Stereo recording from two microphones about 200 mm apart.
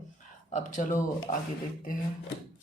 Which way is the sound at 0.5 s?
40° left (ahead or behind).